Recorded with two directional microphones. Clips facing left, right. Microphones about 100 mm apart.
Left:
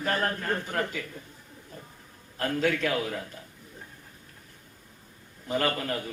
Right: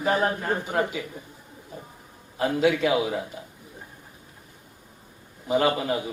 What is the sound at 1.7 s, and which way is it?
Bird, 10° right (ahead or behind).